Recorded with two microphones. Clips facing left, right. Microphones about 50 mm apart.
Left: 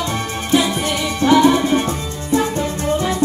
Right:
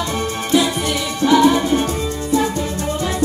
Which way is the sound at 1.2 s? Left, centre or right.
Left.